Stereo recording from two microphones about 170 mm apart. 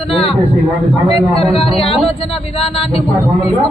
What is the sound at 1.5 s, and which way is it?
Speech, 35° left (ahead or behind).